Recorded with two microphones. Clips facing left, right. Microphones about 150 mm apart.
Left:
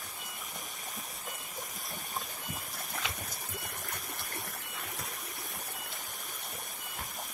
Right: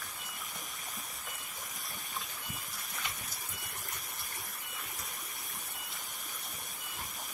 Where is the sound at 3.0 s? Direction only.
55° left (ahead or behind).